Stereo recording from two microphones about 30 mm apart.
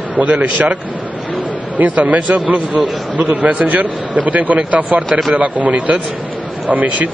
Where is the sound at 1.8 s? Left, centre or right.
Right.